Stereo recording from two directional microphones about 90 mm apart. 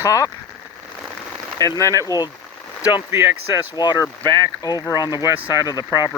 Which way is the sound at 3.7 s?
55° left (ahead or behind).